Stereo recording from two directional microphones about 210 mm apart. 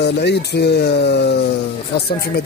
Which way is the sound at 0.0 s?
55° left (ahead or behind).